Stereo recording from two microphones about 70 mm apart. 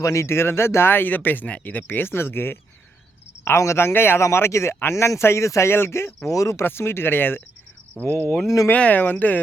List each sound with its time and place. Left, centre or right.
0.0 s speech: left
6.2 s speech: left
6.7 s speech: left
8.7 s speech: left